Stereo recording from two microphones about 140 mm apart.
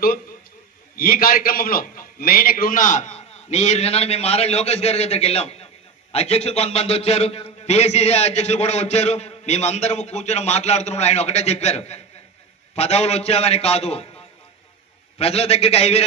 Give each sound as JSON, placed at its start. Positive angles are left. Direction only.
{"t": 0.9, "sound": "a man's voice", "side_deg": 90}
{"t": 15.1, "sound": "a man's voice", "side_deg": 45}